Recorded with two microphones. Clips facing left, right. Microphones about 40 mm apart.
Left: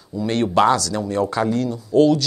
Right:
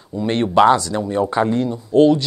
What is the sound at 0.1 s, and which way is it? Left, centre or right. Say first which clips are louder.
Speech: right 2 dB; right.